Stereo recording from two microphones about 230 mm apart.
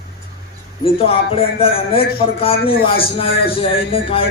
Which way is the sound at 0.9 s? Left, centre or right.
Left.